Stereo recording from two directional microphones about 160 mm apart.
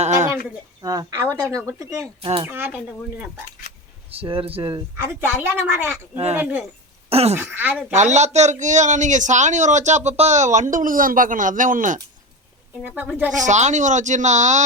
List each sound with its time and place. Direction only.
0.8 s speech: 20° right (ahead or behind)
4.1 s speech: 35° right (ahead or behind)
4.7 s speech: 20° right (ahead or behind)
7.1 s speech: 40° right (ahead or behind)
7.3 s speech: 10° right (ahead or behind)
7.9 s a man's voice: 45° right (ahead or behind)
12.8 s speech: 5° right (ahead or behind)
13.4 s a man's voice: 45° right (ahead or behind)